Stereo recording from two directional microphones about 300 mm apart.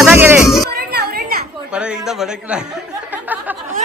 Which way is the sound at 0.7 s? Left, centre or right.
Right.